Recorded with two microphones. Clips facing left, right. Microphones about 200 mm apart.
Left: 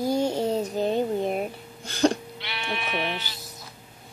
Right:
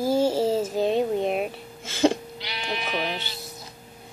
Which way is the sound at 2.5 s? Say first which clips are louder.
Right 1 dB; 35° right (ahead or behind).